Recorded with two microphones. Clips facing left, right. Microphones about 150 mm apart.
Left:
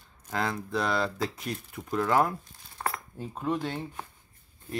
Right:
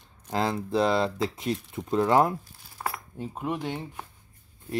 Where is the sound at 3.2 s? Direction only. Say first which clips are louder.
Even; 15° right (ahead or behind).